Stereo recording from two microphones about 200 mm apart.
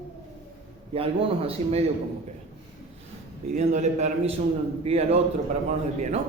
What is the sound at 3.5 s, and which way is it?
Speech, 35° right (ahead or behind).